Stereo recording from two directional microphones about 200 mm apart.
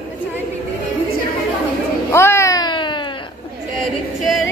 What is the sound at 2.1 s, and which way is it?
Cat, 15° left (ahead or behind).